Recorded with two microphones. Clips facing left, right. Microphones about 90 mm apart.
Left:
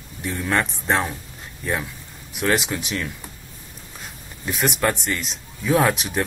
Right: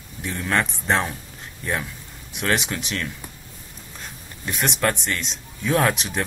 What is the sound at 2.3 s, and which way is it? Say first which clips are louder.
Speech: left 2 dB; centre (ahead or behind).